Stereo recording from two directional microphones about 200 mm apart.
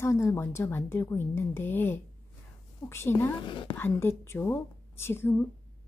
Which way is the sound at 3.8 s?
10° left (ahead or behind).